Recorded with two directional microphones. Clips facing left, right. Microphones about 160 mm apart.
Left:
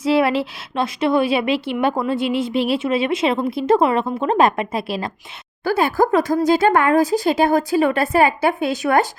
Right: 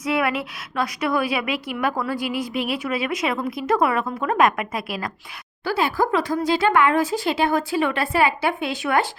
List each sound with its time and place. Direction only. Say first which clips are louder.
0.0 s a woman's voice: left 6 dB; 30° left (ahead or behind)
5.6 s speech: left 4 dB; 45° left (ahead or behind)